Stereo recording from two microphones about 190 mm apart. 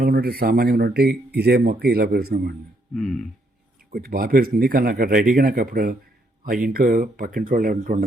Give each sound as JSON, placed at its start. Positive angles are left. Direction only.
{"t": 0.0, "sound": "speech", "side_deg": -50}
{"t": 2.9, "sound": "speech", "side_deg": 0}
{"t": 3.9, "sound": "speech", "side_deg": -50}